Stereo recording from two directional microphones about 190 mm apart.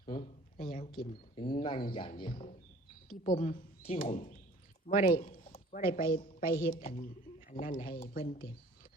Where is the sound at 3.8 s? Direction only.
30° left (ahead or behind).